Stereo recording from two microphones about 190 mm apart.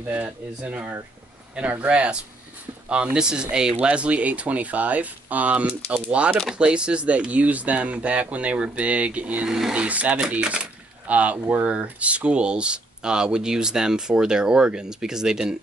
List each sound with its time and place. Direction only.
0.1 s speech: 5° right (ahead or behind)